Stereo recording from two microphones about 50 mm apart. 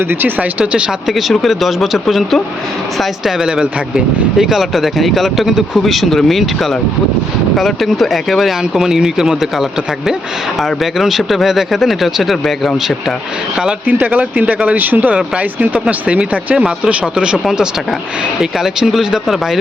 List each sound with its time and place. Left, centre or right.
0.1 s speech: right
0.6 s speech: right
1.0 s speech: centre
13.8 s speech: right; by 19.5 s centre